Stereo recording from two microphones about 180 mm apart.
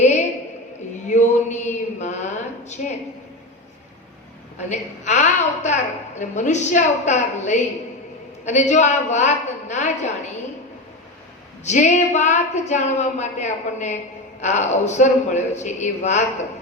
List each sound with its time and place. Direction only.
0.0 s a sound: 40° left (ahead or behind)
4.7 s a woman's voice: 40° left (ahead or behind)
11.6 s a woman's voice: 40° left (ahead or behind)